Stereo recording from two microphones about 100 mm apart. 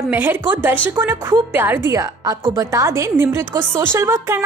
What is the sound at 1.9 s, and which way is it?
A woman's voice, 35° right (ahead or behind).